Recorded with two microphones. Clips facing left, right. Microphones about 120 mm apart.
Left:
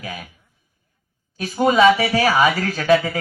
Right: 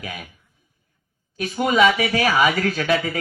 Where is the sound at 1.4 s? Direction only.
35° left (ahead or behind).